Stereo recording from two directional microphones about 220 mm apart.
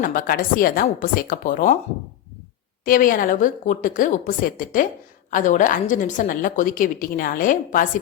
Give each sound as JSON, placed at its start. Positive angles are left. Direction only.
{"t": 0.0, "sound": "a woman's voice", "side_deg": 40}
{"t": 2.8, "sound": "a woman's voice", "side_deg": 40}